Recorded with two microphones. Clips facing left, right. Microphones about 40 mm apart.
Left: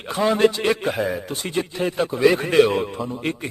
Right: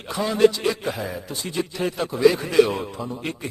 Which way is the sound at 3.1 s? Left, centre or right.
Left.